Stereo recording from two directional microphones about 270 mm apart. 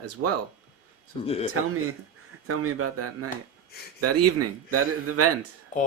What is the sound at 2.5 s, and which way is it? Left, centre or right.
Speech, right.